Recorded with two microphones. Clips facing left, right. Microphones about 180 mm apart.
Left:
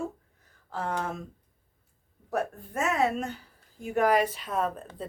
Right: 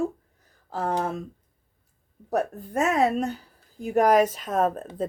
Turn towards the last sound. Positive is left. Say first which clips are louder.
# right 6 dB
turn(degrees=-45)  # may be behind; listen again after turning